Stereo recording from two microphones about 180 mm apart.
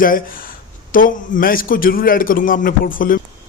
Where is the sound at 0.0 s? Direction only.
50° left (ahead or behind).